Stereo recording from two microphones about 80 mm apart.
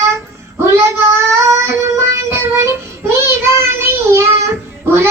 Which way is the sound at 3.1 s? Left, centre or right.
Right.